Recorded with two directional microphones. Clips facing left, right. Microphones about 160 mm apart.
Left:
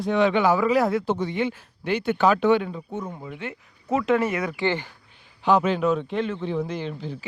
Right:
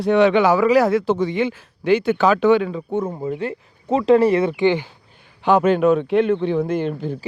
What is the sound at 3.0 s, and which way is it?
Speech, 45° right (ahead or behind).